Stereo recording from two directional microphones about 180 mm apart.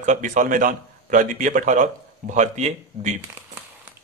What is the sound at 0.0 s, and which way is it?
A man's voice, 45° right (ahead or behind).